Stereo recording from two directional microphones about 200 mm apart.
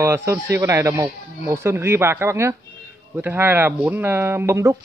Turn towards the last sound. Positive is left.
turn(degrees=-15)  # may be behind; listen again after turning